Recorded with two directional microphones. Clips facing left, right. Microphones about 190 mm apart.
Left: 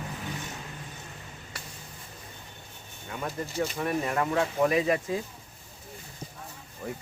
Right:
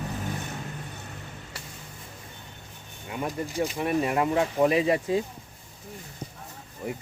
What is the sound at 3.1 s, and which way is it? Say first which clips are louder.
Speech: right 3 dB; 15° right (ahead or behind).